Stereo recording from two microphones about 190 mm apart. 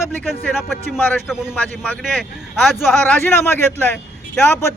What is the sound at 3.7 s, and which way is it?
Speech, 10° left (ahead or behind).